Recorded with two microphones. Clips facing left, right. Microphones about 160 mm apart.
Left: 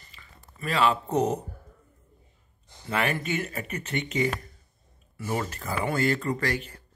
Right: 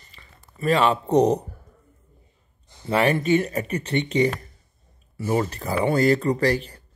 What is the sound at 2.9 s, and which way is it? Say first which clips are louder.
Speech: right 9 dB; 35° right (ahead or behind).